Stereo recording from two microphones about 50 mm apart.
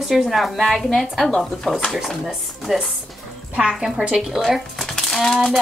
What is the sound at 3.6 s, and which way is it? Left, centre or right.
Speech, centre.